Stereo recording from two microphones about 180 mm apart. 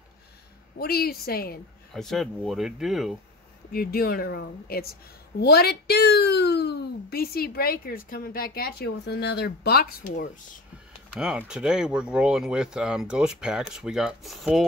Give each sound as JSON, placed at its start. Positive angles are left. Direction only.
{"t": 0.7, "sound": "speech", "side_deg": 60}
{"t": 2.0, "sound": "speech", "side_deg": 0}
{"t": 3.7, "sound": "a woman's voice", "side_deg": 55}
{"t": 11.1, "sound": "speech", "side_deg": -5}